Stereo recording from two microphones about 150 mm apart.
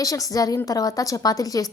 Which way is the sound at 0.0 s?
25° left (ahead or behind).